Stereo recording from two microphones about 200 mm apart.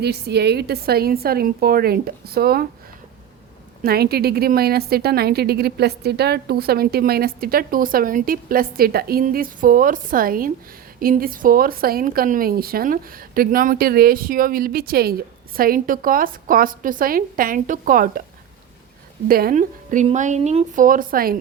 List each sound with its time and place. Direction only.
0.0 s a woman's voice: 55° right (ahead or behind)
3.8 s a woman's voice: 50° right (ahead or behind)
19.3 s speech: 45° right (ahead or behind)